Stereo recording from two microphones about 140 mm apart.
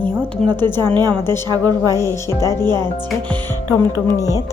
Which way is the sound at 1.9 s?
20° left (ahead or behind).